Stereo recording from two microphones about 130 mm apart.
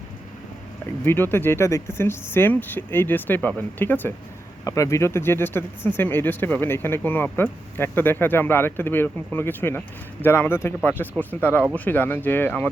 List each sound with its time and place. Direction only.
1.0 s speech: 15° left (ahead or behind)